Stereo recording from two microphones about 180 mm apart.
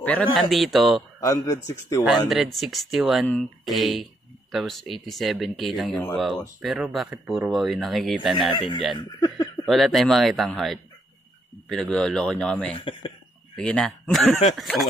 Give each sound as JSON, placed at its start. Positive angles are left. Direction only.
{"t": 0.0, "sound": "speech", "side_deg": 5}
{"t": 1.2, "sound": "speech", "side_deg": 15}
{"t": 2.0, "sound": "speech", "side_deg": 0}
{"t": 8.9, "sound": "speech", "side_deg": 25}
{"t": 9.7, "sound": "speech", "side_deg": 0}
{"t": 12.7, "sound": "speech", "side_deg": 30}
{"t": 13.6, "sound": "speech", "side_deg": 5}